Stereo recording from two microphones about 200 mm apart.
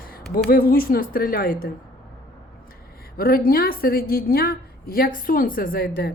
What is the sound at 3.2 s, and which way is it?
Speech, 50° left (ahead or behind).